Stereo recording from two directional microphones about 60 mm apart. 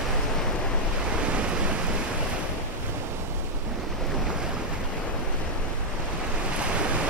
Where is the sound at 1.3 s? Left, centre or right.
Centre.